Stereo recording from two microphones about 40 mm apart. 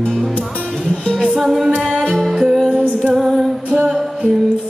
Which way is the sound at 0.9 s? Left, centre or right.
Left.